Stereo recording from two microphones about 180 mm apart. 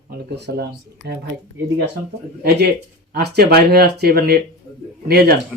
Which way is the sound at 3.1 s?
60° right (ahead or behind).